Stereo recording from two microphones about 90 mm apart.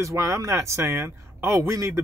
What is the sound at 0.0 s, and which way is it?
A man's voice, 35° right (ahead or behind).